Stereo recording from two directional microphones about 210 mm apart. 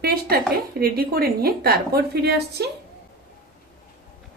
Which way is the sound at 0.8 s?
45° right (ahead or behind).